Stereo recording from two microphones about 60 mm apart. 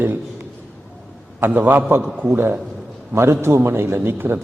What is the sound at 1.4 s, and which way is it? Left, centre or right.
Speech, right.